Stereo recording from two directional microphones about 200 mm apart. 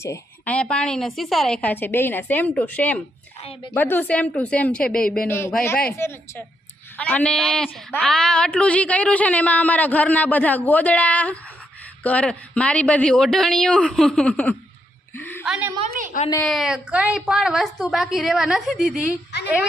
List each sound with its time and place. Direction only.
0.0 s a woman's voice: 10° left (ahead or behind)
15.1 s a sound: 10° left (ahead or behind)
15.4 s a woman's voice: 5° right (ahead or behind)